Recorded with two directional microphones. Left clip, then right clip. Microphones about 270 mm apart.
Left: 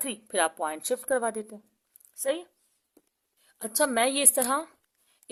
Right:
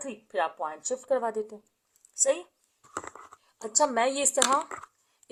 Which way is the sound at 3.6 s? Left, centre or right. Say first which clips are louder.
Right 1 dB; left.